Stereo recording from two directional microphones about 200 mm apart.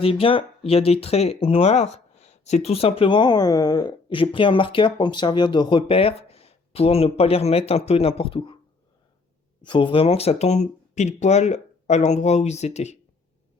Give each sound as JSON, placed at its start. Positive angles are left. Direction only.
{"t": 0.0, "sound": "speech", "side_deg": 30}
{"t": 9.6, "sound": "speech", "side_deg": 25}